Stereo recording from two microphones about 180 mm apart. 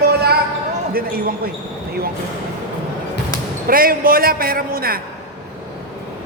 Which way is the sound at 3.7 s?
50° right (ahead or behind).